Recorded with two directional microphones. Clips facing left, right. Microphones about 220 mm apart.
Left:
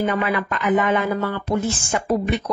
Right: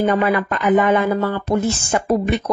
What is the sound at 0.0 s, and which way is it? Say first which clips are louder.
Speech: right 4 dB; 40° right (ahead or behind).